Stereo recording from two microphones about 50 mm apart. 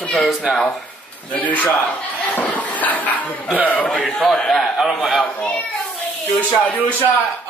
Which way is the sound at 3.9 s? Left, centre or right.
Centre.